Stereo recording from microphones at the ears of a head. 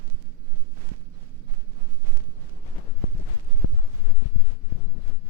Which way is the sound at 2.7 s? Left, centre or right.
Left.